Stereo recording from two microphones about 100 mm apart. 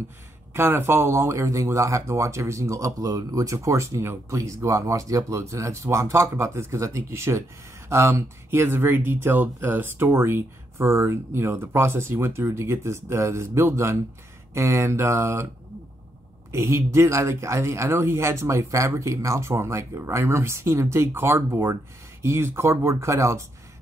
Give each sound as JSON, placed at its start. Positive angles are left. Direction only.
{"t": 0.5, "sound": "speech", "side_deg": -25}
{"t": 16.5, "sound": "speech", "side_deg": -30}